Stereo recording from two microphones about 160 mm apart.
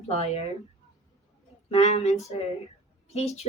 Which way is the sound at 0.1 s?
40° left (ahead or behind).